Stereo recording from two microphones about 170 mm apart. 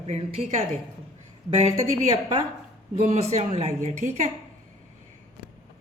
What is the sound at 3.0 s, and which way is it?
A woman's voice, 40° right (ahead or behind).